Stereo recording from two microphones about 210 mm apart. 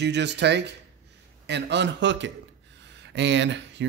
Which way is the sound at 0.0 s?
55° right (ahead or behind).